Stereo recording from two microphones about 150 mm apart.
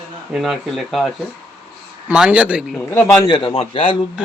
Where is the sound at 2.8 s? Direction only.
15° left (ahead or behind).